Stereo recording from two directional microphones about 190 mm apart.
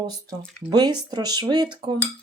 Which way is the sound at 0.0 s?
20° right (ahead or behind).